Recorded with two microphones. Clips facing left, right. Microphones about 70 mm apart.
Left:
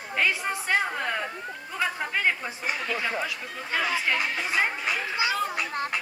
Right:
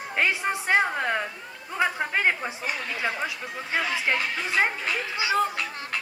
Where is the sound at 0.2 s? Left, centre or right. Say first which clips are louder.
Right 1 dB; right.